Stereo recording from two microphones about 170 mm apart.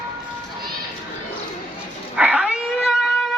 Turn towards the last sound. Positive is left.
turn(degrees=-5)  # may be behind; listen again after turning